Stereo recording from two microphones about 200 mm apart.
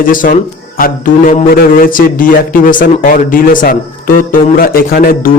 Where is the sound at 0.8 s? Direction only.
45° left (ahead or behind).